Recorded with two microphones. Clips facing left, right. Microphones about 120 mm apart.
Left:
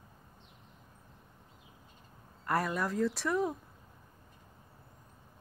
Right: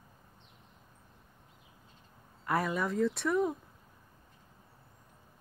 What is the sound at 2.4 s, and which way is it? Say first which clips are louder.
Speech: right 1 dB; centre (ahead or behind).